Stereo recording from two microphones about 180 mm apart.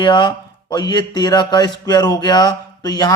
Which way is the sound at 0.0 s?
25° left (ahead or behind).